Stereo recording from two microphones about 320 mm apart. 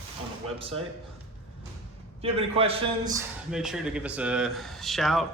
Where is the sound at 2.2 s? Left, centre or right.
Centre.